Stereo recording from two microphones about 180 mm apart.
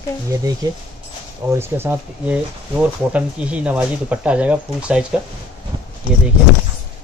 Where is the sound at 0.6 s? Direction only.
20° right (ahead or behind).